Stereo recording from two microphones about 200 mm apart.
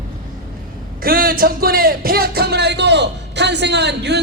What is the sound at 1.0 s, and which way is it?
Speech, 45° right (ahead or behind).